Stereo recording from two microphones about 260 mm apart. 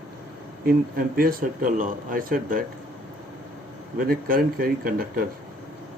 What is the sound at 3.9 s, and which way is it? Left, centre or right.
Speech, right.